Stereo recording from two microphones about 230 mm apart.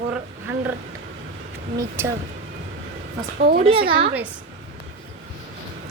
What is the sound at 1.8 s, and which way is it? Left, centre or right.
Speech, centre.